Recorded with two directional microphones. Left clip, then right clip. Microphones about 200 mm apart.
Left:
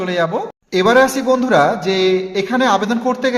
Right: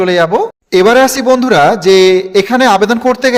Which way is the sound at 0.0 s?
45° right (ahead or behind).